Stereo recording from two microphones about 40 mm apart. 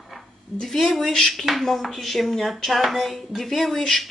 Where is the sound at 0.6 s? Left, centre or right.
Centre.